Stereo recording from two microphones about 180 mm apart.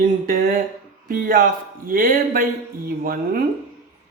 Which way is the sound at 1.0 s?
50° right (ahead or behind).